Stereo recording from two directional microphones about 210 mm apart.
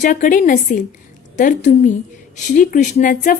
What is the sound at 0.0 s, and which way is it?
A woman's voice, 40° left (ahead or behind).